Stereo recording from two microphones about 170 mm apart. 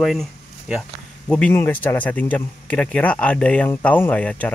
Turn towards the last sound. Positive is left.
turn(degrees=10)  # may be behind; listen again after turning